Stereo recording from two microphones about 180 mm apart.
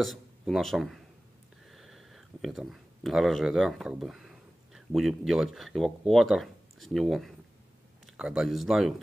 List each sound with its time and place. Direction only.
0.0 s speech: centre (ahead or behind)